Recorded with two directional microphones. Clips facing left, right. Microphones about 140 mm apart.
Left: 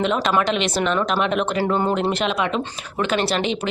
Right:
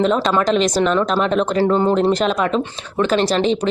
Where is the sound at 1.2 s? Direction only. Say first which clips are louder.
Right 4 dB; 35° right (ahead or behind).